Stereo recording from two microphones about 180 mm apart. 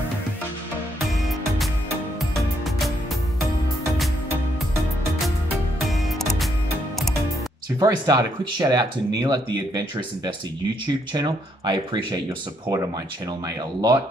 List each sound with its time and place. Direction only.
5.9 s music: centre (ahead or behind)
7.8 s speech: 20° right (ahead or behind)